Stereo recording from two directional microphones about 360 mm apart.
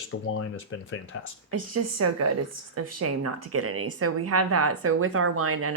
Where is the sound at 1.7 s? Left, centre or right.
Right.